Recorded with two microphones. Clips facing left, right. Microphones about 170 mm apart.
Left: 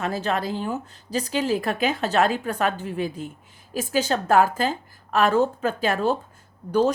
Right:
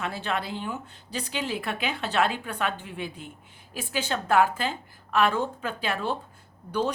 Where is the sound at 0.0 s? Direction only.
40° left (ahead or behind).